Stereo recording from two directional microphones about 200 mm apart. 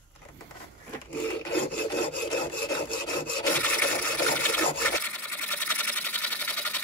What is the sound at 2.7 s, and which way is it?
Sawing, 20° left (ahead or behind).